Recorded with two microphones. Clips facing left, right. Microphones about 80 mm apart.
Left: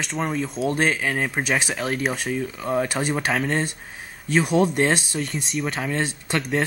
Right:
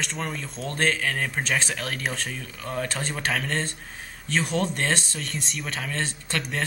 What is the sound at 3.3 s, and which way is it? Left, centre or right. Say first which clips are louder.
Speech: left 1 dB; centre.